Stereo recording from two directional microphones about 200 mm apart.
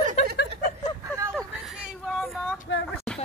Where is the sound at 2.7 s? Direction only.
65° left (ahead or behind).